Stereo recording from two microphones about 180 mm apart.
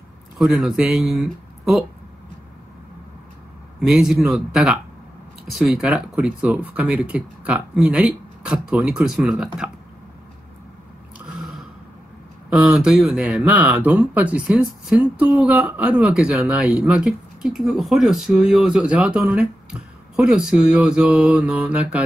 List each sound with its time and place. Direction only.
0.4 s speech: centre (ahead or behind)
3.8 s speech: centre (ahead or behind)
11.1 s gasp: 5° right (ahead or behind)
12.4 s speech: 5° right (ahead or behind)